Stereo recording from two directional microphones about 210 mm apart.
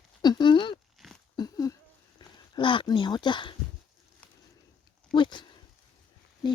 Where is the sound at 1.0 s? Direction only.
Centre (ahead or behind).